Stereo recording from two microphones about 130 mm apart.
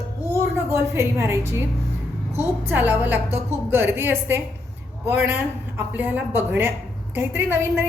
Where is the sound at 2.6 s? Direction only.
15° right (ahead or behind).